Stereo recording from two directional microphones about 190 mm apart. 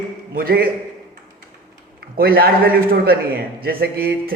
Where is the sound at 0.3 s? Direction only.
50° right (ahead or behind).